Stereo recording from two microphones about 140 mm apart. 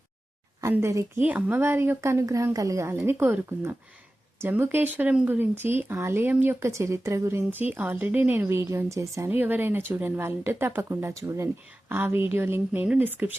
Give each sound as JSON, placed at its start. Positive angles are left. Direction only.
{"t": 0.6, "sound": "speech", "side_deg": -20}